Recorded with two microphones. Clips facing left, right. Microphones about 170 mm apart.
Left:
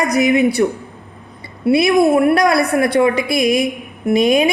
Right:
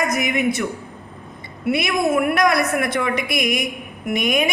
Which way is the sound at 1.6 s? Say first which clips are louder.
Left 8 dB; 35° left (ahead or behind).